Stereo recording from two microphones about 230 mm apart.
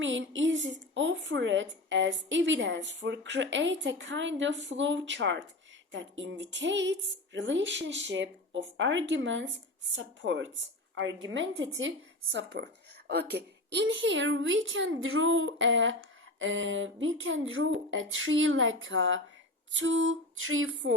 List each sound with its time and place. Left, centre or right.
0.0 s a woman's voice: right